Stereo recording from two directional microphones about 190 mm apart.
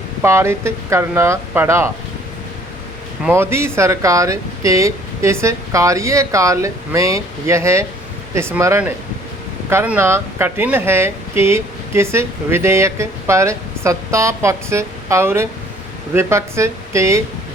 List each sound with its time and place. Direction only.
0.2 s speech: 15° right (ahead or behind)
3.2 s speech: 10° right (ahead or behind)